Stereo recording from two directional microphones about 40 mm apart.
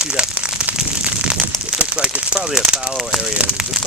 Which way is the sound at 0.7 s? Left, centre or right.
Right.